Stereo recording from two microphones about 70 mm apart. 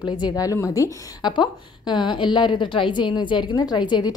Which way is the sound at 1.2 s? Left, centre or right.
Left.